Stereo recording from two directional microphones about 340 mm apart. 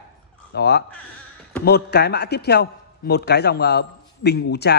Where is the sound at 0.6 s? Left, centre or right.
Left.